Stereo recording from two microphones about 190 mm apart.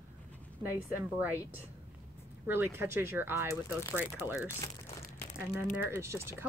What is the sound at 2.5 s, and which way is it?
Speech, 10° right (ahead or behind).